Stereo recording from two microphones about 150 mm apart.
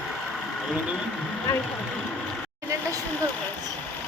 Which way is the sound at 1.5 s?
20° left (ahead or behind).